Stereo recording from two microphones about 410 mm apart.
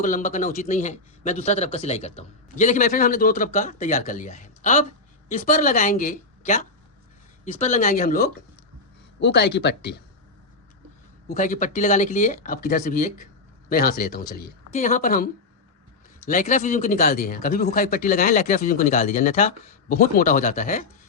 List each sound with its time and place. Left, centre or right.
0.0 s a man's voice: centre
11.3 s speech: centre